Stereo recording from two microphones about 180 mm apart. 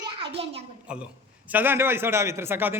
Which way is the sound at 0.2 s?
30° right (ahead or behind).